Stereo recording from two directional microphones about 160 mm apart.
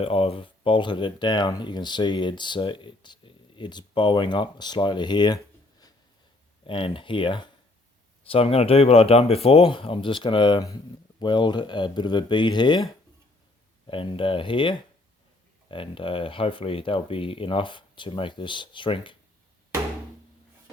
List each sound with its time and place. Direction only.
0.0 s speech: 40° left (ahead or behind)
6.7 s speech: 35° left (ahead or behind)
13.8 s speech: 35° left (ahead or behind)